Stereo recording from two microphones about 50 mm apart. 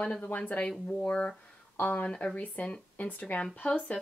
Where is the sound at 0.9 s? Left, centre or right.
Centre.